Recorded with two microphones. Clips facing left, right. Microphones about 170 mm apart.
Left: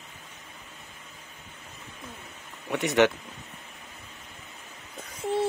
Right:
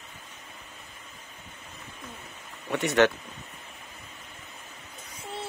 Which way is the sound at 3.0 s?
15° left (ahead or behind).